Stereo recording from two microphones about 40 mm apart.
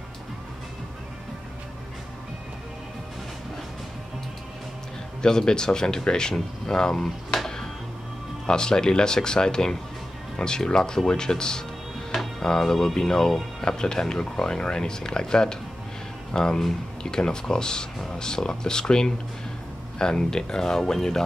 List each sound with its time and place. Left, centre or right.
5.2 s speech: centre
7.3 s music: centre
8.5 s speech: centre